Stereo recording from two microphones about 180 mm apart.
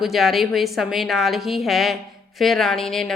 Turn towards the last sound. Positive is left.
turn(degrees=0)  # may be behind; listen again after turning